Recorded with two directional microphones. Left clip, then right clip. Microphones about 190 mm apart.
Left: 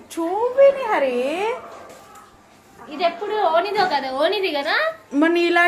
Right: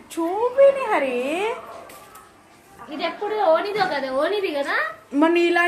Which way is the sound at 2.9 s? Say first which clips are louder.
Left 3 dB; 60° left (ahead or behind).